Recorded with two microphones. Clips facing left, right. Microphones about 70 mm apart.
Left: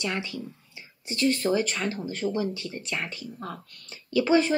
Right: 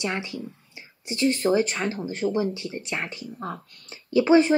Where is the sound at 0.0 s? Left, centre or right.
Right.